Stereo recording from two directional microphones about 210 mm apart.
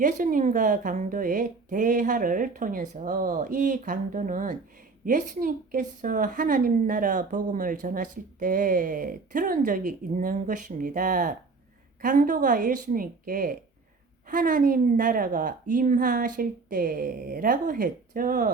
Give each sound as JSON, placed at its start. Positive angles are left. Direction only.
{"t": 0.0, "sound": "a woman's voice", "side_deg": -40}